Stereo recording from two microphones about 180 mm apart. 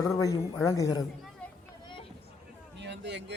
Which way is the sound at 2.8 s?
75° right (ahead or behind).